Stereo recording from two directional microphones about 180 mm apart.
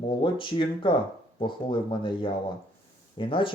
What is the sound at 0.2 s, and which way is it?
Speech, 30° left (ahead or behind).